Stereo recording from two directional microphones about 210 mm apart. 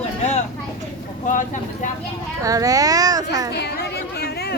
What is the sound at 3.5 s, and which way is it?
Chatter, 50° left (ahead or behind).